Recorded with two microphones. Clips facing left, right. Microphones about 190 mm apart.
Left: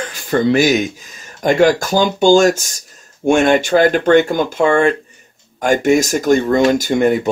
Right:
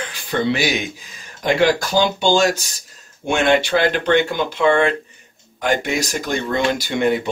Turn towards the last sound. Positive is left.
turn(degrees=45)  # may be behind; listen again after turning